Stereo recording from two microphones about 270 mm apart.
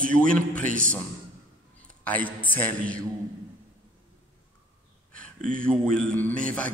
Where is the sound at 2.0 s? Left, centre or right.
Centre.